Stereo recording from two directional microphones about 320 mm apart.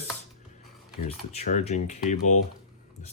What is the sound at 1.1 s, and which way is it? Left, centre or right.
Speech, left.